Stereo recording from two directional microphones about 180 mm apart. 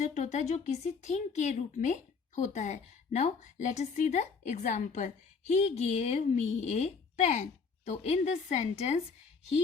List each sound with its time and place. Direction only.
0.0 s speech: 40° left (ahead or behind)